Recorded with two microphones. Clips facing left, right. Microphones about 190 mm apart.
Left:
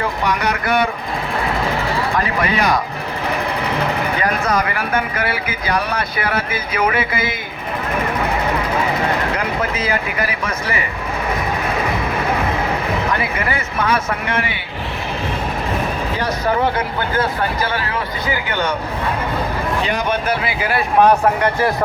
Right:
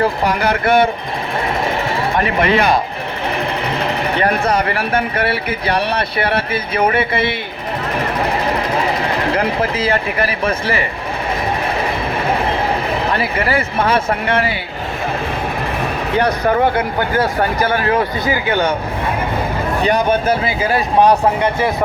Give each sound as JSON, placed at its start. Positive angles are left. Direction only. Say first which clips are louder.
{"t": 0.0, "sound": "speech", "louder": "right 4 dB", "side_deg": -30}
{"t": 2.1, "sound": "speech", "louder": "right 7 dB", "side_deg": -25}
{"t": 4.4, "sound": "speech", "louder": "right 2 dB", "side_deg": -30}
{"t": 8.2, "sound": "vehicle", "louder": "right 2 dB", "side_deg": -30}
{"t": 9.3, "sound": "speech", "louder": "right 4 dB", "side_deg": -30}
{"t": 12.3, "sound": "speech", "louder": "right 4 dB", "side_deg": -30}
{"t": 16.1, "sound": "speech", "louder": "right 6 dB", "side_deg": -60}
{"t": 17.2, "sound": "speech", "louder": "right 3 dB", "side_deg": -45}
{"t": 19.8, "sound": "speech", "louder": "right 8 dB", "side_deg": -45}
{"t": 20.4, "sound": "speech", "louder": "right 3 dB", "side_deg": -35}